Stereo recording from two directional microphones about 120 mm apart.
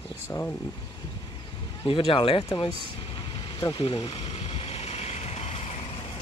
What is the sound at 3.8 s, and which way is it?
Speech, 50° left (ahead or behind).